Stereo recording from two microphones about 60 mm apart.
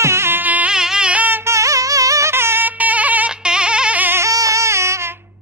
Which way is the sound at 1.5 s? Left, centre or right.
Right.